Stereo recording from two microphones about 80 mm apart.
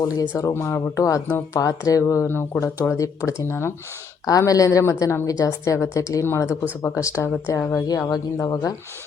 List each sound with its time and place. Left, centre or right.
0.1 s a woman's voice: left
2.2 s a woman's voice: left
7.9 s a woman's voice: left